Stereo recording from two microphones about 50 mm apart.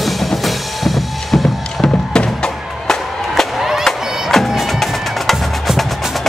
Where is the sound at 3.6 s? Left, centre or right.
Centre.